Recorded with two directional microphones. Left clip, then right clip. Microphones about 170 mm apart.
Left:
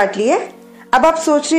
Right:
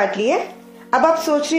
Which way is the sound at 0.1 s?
30° left (ahead or behind).